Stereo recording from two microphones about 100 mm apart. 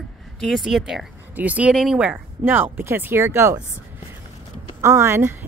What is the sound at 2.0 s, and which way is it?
Speech, 20° right (ahead or behind).